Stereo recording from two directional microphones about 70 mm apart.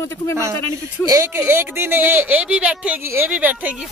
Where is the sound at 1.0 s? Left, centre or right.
Left.